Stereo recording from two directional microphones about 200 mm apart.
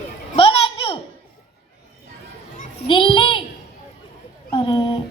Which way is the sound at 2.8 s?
25° left (ahead or behind).